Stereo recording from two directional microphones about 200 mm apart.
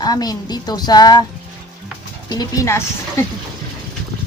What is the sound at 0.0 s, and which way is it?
Speech, 20° left (ahead or behind).